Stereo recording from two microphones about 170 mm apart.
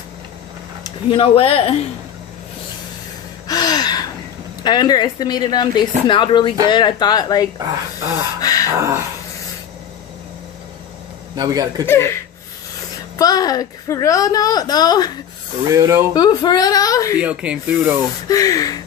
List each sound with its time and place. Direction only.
1.1 s speech: 35° left (ahead or behind)
3.4 s gasp: 25° left (ahead or behind)
4.6 s a woman's voice: 25° left (ahead or behind)
8.4 s a sound: 20° left (ahead or behind)
8.7 s speech: 15° right (ahead or behind)
11.3 s speech: 20° right (ahead or behind)
11.8 s speech: 15° left (ahead or behind)
13.2 s a woman's voice: 20° left (ahead or behind)
15.7 s speech: 20° right (ahead or behind)
16.1 s a woman's voice: 25° left (ahead or behind)
17.2 s speech: 5° right (ahead or behind)
18.3 s a woman's voice: 20° left (ahead or behind)